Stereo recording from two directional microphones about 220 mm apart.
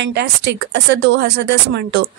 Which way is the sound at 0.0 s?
50° right (ahead or behind).